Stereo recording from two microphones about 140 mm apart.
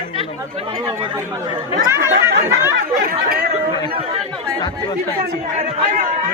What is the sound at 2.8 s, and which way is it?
Speech, 90° right.